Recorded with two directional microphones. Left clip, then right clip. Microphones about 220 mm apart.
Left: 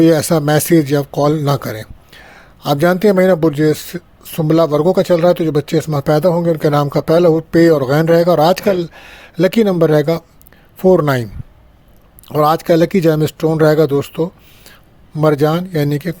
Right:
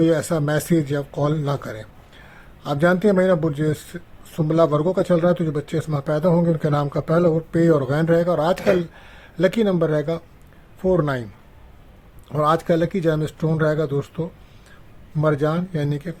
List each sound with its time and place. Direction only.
0.0 s speech: 30° left (ahead or behind)
12.3 s speech: 35° left (ahead or behind)